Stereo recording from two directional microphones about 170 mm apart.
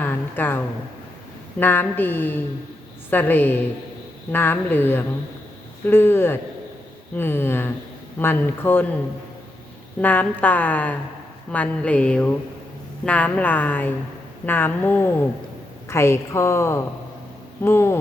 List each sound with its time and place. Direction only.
0.0 s a woman's voice: 10° left (ahead or behind)
10.0 s a woman's voice: 10° left (ahead or behind)